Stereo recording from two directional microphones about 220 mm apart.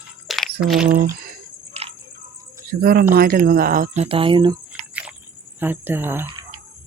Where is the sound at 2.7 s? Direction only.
40° right (ahead or behind).